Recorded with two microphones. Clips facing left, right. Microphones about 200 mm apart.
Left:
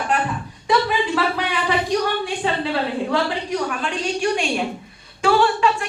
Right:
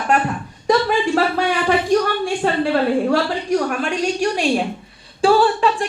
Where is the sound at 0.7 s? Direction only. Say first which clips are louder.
Right 3 dB; 45° right (ahead or behind).